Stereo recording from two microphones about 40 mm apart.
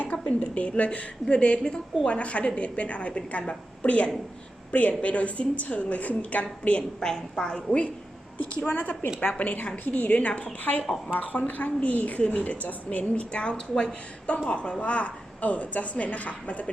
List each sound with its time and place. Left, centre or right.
0.0 s a woman's voice: left
7.0 s a woman's voice: centre
8.6 s a woman's voice: left
9.8 s a woman's voice: left
10.1 s a woman's voice: left